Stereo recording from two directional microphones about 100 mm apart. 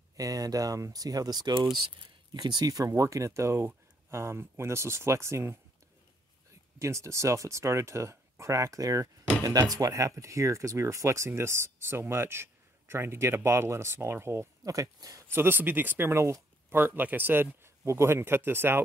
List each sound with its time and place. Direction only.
0.2 s speech: 35° right (ahead or behind)
6.8 s speech: 30° right (ahead or behind)
15.3 s speech: 20° right (ahead or behind)